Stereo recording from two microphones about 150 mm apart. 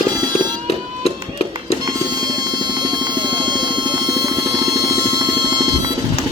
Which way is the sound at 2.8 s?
30° right (ahead or behind).